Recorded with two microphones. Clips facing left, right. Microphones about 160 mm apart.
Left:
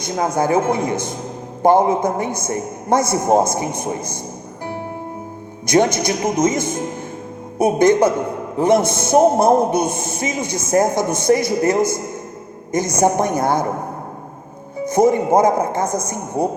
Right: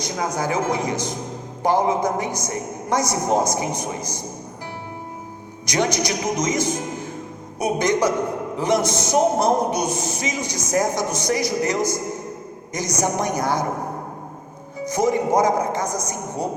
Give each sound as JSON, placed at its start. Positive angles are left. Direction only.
{"t": 0.3, "sound": "a man's voice", "side_deg": 55}
{"t": 5.6, "sound": "a man's voice", "side_deg": 55}
{"t": 14.8, "sound": "a man's voice", "side_deg": 55}